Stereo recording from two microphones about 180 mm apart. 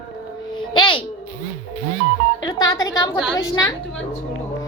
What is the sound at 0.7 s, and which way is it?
Speech, 25° left (ahead or behind).